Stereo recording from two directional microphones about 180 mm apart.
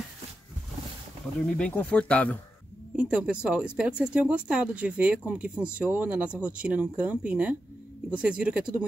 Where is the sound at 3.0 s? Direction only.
5° right (ahead or behind).